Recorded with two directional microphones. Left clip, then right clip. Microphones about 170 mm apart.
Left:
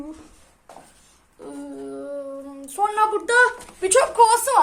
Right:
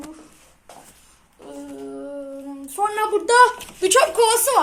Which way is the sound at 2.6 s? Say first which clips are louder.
Even; 5° left (ahead or behind).